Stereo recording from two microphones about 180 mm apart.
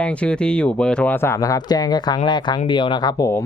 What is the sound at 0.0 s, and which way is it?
Speech, 5° left (ahead or behind).